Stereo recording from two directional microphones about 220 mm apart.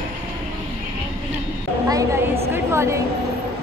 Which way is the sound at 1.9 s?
15° right (ahead or behind).